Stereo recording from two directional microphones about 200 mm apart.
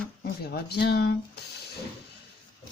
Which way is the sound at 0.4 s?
55° left (ahead or behind).